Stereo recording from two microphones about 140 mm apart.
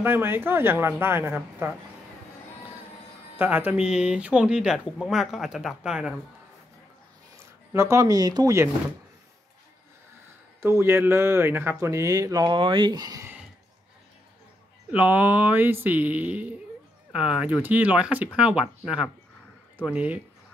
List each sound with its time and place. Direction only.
0.0 s speech: 15° right (ahead or behind)
3.3 s speech: 10° right (ahead or behind)
7.7 s speech: 20° right (ahead or behind)
10.6 s speech: 15° right (ahead or behind)
14.9 s speech: 10° right (ahead or behind)